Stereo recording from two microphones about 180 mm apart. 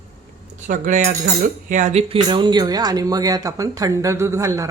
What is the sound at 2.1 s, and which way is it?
Speech, 25° right (ahead or behind).